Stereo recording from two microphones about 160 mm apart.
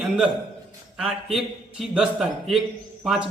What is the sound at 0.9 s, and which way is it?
A man's voice, 5° right (ahead or behind).